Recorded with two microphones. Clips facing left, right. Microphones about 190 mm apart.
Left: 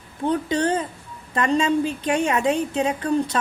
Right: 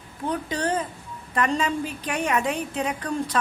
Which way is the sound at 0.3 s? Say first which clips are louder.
Left 5 dB; 30° left (ahead or behind).